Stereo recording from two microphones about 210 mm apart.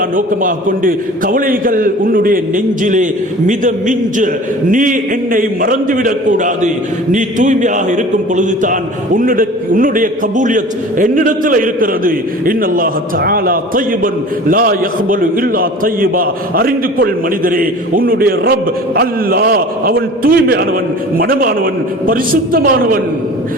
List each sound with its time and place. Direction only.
0.2 s a man's voice: 40° right (ahead or behind)